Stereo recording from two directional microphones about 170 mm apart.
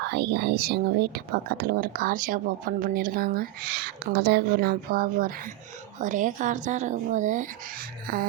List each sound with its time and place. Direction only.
0.0 s speech: 75° right (ahead or behind); by 8.3 s 60° right (ahead or behind)